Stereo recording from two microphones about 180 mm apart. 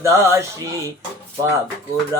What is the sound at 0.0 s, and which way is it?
Speech, 15° right (ahead or behind).